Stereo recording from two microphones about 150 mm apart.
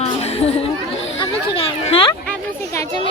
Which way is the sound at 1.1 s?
35° left (ahead or behind).